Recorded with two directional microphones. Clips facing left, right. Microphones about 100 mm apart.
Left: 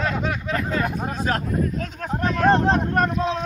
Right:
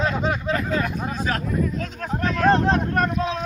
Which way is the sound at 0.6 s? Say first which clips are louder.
Even; 35° left (ahead or behind).